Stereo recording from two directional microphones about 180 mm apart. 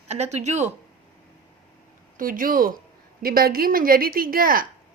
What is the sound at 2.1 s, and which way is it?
A woman's voice, 50° right (ahead or behind).